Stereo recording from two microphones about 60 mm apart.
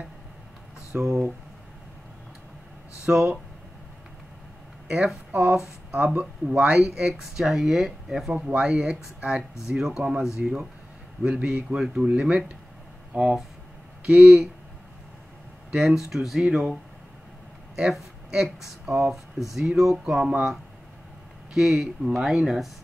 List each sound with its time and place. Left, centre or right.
0.9 s speech: right
3.1 s speech: centre
4.8 s speech: centre
6.1 s speech: centre
15.7 s speech: centre
17.7 s speech: centre
20.2 s speech: right
21.5 s speech: centre